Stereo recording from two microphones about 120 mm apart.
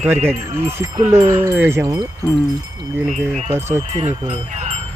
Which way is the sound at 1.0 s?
65° right (ahead or behind).